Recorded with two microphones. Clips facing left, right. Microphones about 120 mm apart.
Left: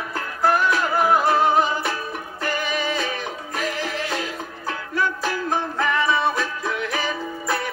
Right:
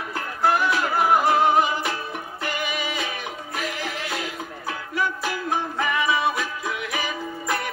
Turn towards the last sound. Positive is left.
turn(degrees=-10)  # may be behind; listen again after turning